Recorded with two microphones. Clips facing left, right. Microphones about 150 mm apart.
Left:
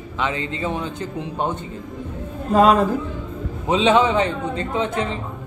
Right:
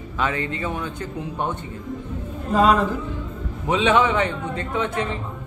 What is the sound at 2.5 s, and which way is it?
Speech, 40° left (ahead or behind).